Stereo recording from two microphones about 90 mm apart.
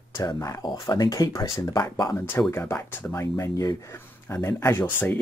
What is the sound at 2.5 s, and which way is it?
Speech, 25° left (ahead or behind).